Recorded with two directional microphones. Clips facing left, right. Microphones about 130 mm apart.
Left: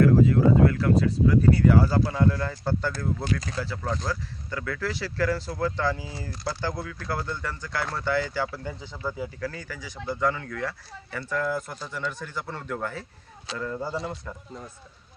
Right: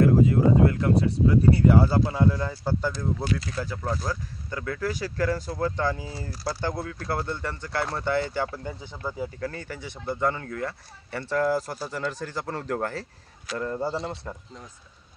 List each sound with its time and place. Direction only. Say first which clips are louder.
0.0 s speech: even; 25° right (ahead or behind); by 3.3 s 10° right (ahead or behind)
4.1 s speech: left 1 dB; 20° right (ahead or behind); by 13.0 s 40° right (ahead or behind)
13.6 s speech: right 2 dB; 30° right (ahead or behind)